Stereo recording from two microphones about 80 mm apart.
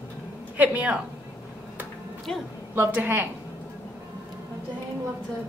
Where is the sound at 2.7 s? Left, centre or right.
Right.